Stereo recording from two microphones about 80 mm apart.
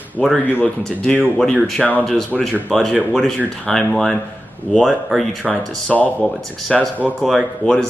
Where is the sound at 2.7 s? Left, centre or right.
Centre.